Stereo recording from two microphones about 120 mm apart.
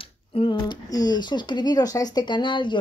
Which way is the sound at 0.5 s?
35° left (ahead or behind).